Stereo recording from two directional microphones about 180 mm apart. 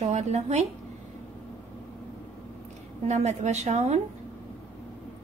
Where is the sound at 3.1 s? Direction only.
40° right (ahead or behind).